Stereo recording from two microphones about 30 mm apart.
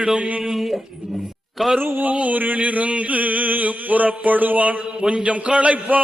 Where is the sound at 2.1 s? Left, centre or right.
Right.